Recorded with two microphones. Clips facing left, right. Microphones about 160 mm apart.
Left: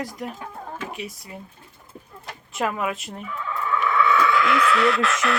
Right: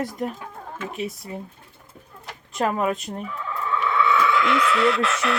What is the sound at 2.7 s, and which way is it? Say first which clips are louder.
Speech: right 4 dB; 35° right (ahead or behind).